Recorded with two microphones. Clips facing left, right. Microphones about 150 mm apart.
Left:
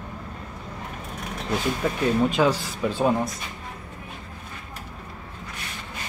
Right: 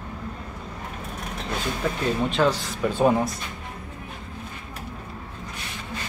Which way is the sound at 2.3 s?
5° left (ahead or behind).